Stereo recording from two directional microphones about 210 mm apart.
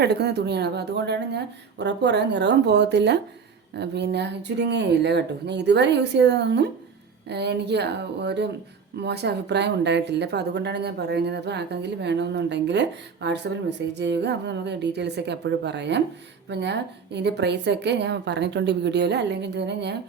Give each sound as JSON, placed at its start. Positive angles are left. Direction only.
{"t": 0.0, "sound": "a woman's voice", "side_deg": -50}